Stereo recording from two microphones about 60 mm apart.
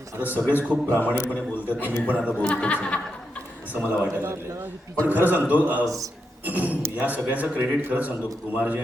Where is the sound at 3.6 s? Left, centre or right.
Right.